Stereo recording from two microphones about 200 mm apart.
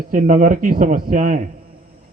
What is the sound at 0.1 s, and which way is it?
Speech, 40° right (ahead or behind).